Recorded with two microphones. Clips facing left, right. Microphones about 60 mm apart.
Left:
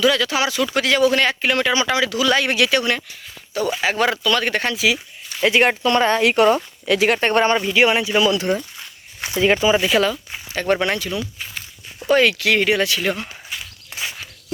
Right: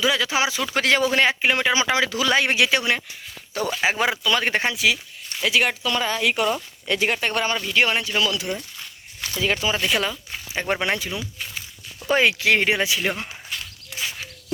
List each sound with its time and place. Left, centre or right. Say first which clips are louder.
0.0 s speech: left 3 dB; centre
4.7 s speech: left 2 dB; centre
5.4 s speech: left 5 dB; left
7.2 s speech: left 7 dB; left
7.7 s speech: left 5 dB; centre
8.1 s speech: left 6 dB; left
9.4 s speech: left 7 dB; left
9.8 s speech: left 5 dB; centre
10.5 s speech: left 4 dB; centre; by 12.8 s right
12.8 s speech: left 3 dB; centre